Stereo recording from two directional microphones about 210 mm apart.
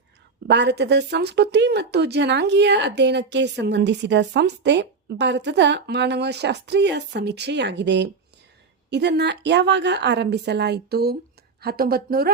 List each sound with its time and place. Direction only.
0.4 s a woman's voice: 55° right (ahead or behind)